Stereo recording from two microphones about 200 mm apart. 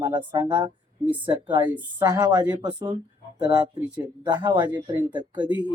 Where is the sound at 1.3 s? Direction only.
20° right (ahead or behind).